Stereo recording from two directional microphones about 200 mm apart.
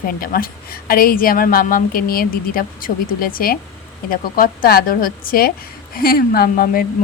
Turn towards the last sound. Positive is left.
turn(degrees=50)  # may be behind; listen again after turning